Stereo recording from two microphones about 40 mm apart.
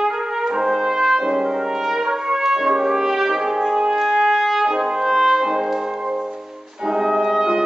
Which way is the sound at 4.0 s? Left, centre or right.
Centre.